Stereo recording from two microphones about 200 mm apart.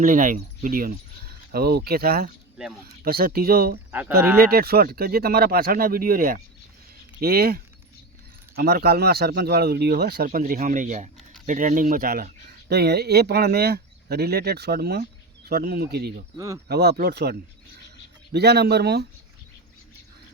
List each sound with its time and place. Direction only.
0.0 s speech: 40° right (ahead or behind)
3.9 s speech: 10° right (ahead or behind)
4.4 s speech: 50° right (ahead or behind)